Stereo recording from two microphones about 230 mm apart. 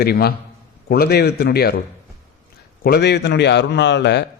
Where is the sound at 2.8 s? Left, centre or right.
Left.